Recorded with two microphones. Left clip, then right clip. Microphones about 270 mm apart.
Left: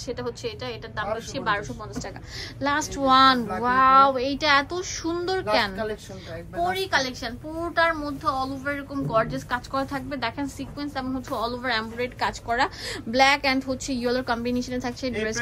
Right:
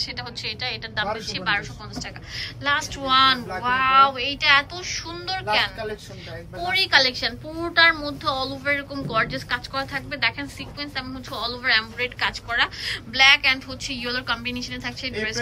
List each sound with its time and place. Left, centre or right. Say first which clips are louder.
0.0 s a woman's voice: right 1 dB; centre
2.6 s a woman's voice: even; left
6.6 s a woman's voice: right 5 dB; centre